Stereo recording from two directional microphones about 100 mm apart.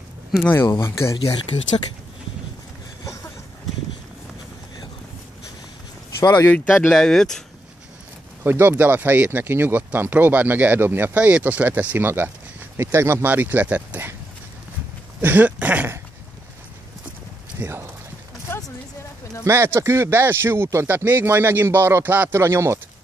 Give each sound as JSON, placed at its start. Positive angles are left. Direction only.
{"t": 0.4, "sound": "speech", "side_deg": 25}
{"t": 1.1, "sound": "speech", "side_deg": 65}
{"t": 6.5, "sound": "speech", "side_deg": 15}
{"t": 8.5, "sound": "speech", "side_deg": -20}
{"t": 15.2, "sound": "a sound", "side_deg": -15}
{"t": 17.6, "sound": "speech", "side_deg": -25}
{"t": 18.5, "sound": "a sound", "side_deg": 20}
{"t": 19.4, "sound": "speech", "side_deg": -25}